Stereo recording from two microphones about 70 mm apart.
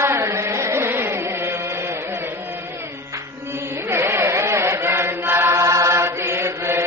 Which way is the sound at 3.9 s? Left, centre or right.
Right.